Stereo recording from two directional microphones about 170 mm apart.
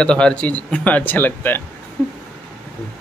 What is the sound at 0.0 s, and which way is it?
Speech, 5° left (ahead or behind).